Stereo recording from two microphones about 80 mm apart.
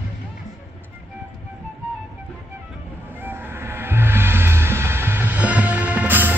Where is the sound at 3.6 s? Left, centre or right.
Right.